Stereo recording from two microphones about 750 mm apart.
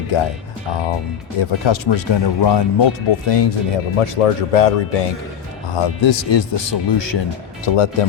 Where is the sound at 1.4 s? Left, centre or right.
Left.